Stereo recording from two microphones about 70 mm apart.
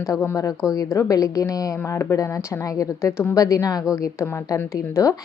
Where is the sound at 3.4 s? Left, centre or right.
Left.